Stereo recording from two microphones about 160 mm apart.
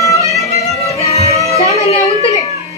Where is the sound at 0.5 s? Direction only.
40° left (ahead or behind).